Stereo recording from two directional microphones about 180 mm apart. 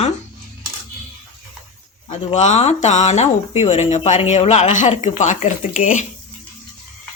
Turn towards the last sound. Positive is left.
turn(degrees=45)  # may be behind; listen again after turning